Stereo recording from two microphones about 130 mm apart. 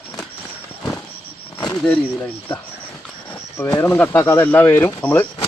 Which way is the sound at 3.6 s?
30° left (ahead or behind).